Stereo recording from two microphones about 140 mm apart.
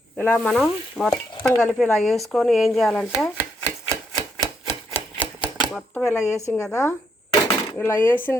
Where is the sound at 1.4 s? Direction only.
5° left (ahead or behind).